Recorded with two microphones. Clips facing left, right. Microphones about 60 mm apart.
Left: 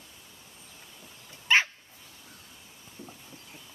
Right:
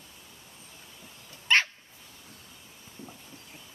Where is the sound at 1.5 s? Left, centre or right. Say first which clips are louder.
Left 1 dB; centre.